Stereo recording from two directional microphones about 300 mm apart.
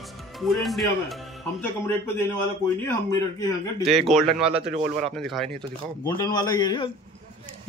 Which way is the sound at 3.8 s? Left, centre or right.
Centre.